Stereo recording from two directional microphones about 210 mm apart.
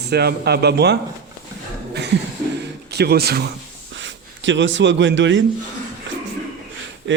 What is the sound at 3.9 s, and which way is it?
Speech, 60° right (ahead or behind).